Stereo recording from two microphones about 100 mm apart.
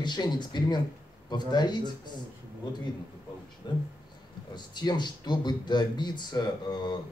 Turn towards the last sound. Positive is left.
turn(degrees=45)  # may be behind; listen again after turning